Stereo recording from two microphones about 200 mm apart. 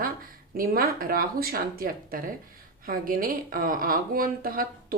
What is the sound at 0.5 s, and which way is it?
Speech, 45° right (ahead or behind).